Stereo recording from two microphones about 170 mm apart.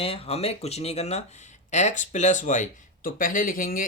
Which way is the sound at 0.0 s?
35° left (ahead or behind).